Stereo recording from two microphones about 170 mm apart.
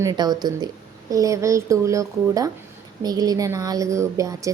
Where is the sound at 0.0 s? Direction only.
25° right (ahead or behind).